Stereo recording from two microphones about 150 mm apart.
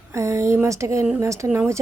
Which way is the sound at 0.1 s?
20° right (ahead or behind).